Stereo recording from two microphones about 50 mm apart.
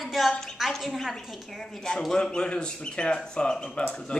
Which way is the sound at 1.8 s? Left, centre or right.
Centre.